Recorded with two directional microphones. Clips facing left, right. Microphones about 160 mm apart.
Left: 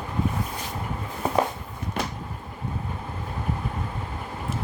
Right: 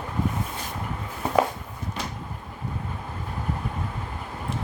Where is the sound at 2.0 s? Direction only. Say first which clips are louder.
Left 5 dB; 60° left (ahead or behind).